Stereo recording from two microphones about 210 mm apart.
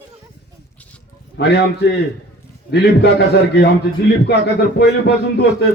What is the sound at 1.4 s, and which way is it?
Speech, 55° left (ahead or behind).